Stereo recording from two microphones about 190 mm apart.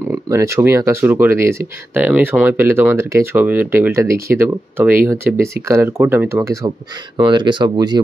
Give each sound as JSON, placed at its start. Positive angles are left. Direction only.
{"t": 0.1, "sound": "speech", "side_deg": -15}